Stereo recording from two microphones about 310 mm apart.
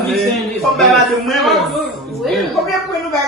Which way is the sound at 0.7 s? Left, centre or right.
Centre.